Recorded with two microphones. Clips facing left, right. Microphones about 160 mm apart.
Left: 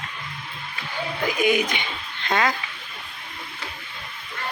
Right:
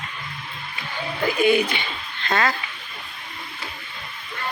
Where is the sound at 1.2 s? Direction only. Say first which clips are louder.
Right 3 dB; 10° left (ahead or behind).